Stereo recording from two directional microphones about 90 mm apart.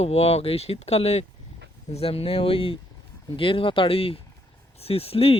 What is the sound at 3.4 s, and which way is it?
Speech, 75° left (ahead or behind).